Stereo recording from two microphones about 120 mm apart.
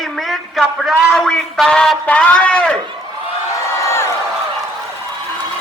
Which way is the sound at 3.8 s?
25° left (ahead or behind).